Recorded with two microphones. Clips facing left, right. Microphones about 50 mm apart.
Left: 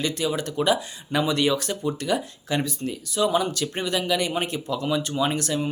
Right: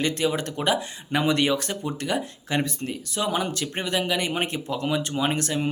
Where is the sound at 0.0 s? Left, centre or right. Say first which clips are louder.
Right 1 dB; right.